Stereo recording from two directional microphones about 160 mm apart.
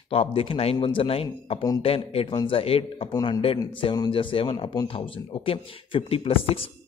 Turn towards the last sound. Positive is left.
turn(degrees=35)  # may be behind; listen again after turning